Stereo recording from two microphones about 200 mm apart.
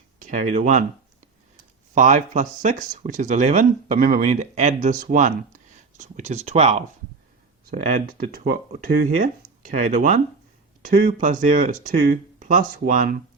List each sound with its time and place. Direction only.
0.2 s speech: 40° right (ahead or behind)
2.0 s speech: 40° right (ahead or behind)